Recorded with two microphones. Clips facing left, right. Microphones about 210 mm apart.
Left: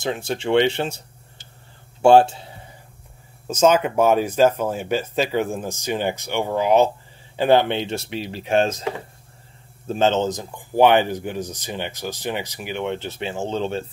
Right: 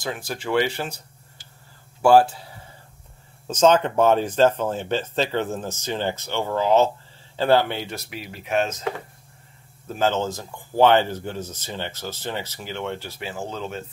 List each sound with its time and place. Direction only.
0.0 s a man's voice: 25° left (ahead or behind)
3.4 s speech: 10° left (ahead or behind); by 8.8 s 30° left (ahead or behind)
9.8 s speech: 25° left (ahead or behind)